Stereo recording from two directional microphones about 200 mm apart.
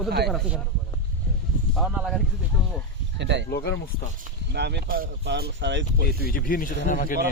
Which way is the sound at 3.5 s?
55° left (ahead or behind).